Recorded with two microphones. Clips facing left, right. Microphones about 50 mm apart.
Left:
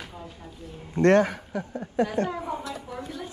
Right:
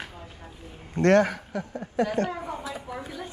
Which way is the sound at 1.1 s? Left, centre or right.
Right.